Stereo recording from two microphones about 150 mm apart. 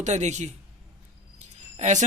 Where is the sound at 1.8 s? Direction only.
50° right (ahead or behind).